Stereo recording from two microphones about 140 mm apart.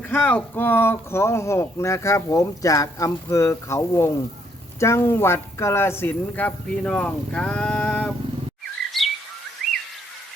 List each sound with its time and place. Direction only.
0.1 s speech: 10° left (ahead or behind)
8.9 s chirp: centre (ahead or behind)